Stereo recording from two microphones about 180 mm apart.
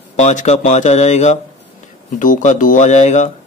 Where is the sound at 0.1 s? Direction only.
40° left (ahead or behind).